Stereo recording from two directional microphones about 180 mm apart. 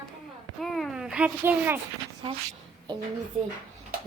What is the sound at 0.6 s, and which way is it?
Speech, centre (ahead or behind).